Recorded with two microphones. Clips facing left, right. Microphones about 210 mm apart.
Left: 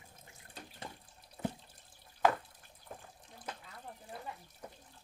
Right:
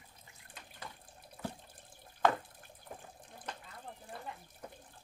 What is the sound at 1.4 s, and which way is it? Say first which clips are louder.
Water: left 4 dB; 35° left (ahead or behind).